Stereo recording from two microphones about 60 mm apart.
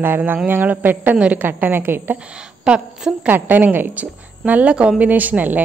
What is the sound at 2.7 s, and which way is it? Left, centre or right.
Speech, centre.